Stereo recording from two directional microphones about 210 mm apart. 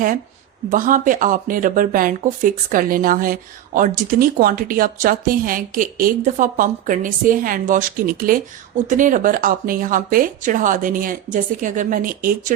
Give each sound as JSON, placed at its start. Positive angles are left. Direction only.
{"t": 0.7, "sound": "speech", "side_deg": -40}